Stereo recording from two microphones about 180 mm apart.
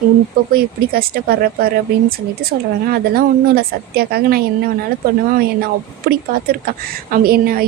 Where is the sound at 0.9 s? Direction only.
60° right (ahead or behind).